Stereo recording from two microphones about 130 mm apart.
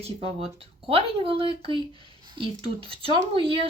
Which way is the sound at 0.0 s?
50° right (ahead or behind).